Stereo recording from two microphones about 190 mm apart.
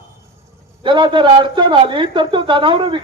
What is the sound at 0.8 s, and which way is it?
A man's voice, 25° right (ahead or behind).